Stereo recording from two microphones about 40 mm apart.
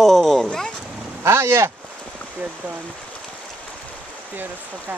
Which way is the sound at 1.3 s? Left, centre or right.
Right.